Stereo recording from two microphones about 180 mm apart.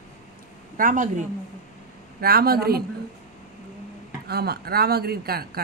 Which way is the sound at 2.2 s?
60° right (ahead or behind).